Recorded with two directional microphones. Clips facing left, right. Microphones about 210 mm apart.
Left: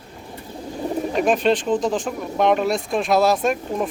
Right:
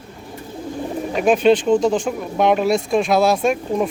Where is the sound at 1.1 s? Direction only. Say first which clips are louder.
Right 5 dB; centre (ahead or behind).